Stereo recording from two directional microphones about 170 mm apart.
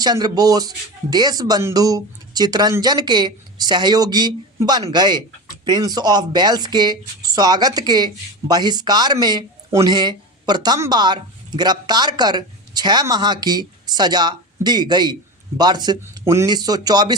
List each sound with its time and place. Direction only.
0.0 s speech: 25° right (ahead or behind)